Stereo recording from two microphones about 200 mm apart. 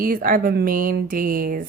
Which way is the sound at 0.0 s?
45° right (ahead or behind).